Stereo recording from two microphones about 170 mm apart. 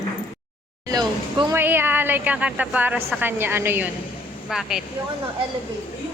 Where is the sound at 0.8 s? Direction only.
20° right (ahead or behind).